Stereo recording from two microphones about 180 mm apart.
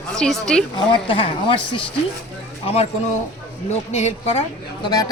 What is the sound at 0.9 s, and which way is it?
Speech, 30° left (ahead or behind).